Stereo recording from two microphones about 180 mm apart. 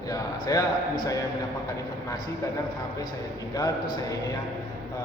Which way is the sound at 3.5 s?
20° left (ahead or behind).